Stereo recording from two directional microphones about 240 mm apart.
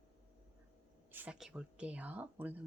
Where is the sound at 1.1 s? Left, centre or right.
Centre.